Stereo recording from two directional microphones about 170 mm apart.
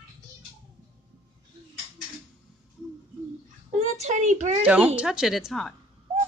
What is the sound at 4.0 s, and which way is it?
Speech, 45° right (ahead or behind).